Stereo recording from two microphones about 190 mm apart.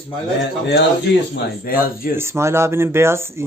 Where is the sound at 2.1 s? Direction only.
15° right (ahead or behind).